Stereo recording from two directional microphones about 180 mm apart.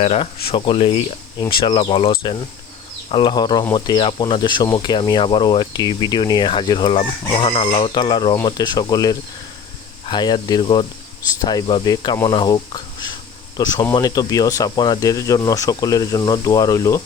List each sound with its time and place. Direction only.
0.0 s speech: 35° left (ahead or behind); by 17.0 s 20° left (ahead or behind)